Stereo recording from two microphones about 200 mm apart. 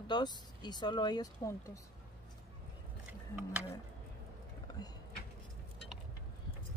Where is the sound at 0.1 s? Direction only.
20° left (ahead or behind).